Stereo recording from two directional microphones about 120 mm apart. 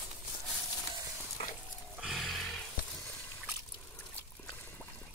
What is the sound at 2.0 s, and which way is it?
Music, centre (ahead or behind).